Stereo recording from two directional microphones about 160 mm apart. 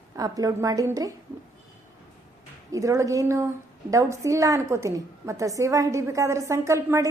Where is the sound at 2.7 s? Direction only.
20° right (ahead or behind).